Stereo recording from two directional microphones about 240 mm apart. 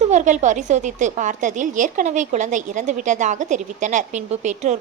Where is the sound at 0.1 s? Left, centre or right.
Right.